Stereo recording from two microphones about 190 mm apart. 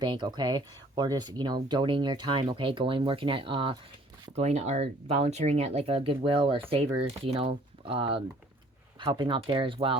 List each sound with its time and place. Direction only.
0.0 s speech: 25° right (ahead or behind)